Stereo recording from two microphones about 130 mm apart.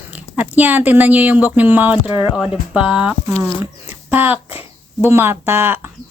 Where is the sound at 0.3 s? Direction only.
10° right (ahead or behind).